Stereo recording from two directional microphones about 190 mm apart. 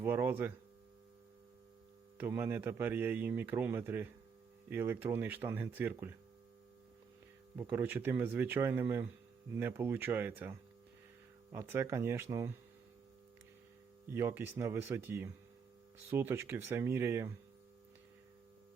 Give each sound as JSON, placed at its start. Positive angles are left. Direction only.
{"t": 0.0, "sound": "a man's voice", "side_deg": -10}
{"t": 2.1, "sound": "a man's voice", "side_deg": -10}
{"t": 7.5, "sound": "a man's voice", "side_deg": -10}
{"t": 11.5, "sound": "a man's voice", "side_deg": -15}
{"t": 14.1, "sound": "a man's voice", "side_deg": -10}